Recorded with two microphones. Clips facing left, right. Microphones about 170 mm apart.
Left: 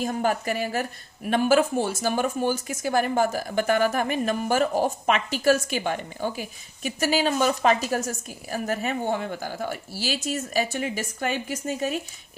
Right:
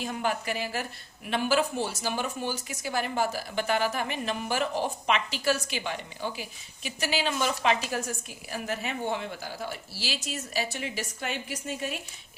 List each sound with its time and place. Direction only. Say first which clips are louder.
0.0 s a woman's voice: left 5 dB; 45° left (ahead or behind)